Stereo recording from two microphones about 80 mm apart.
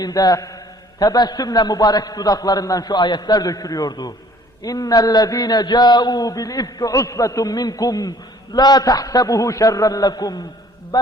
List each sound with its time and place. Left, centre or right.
0.0 s a man's voice: left
10.9 s mantra: left